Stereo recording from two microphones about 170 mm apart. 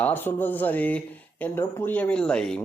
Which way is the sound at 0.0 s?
10° left (ahead or behind).